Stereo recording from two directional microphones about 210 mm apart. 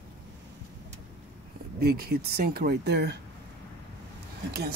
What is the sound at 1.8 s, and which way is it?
Speech, 45° right (ahead or behind).